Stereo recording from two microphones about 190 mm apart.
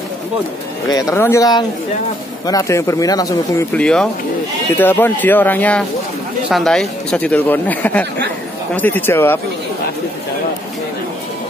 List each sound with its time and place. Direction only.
0.9 s speech: 15° left (ahead or behind)
3.7 s speech: 5° left (ahead or behind)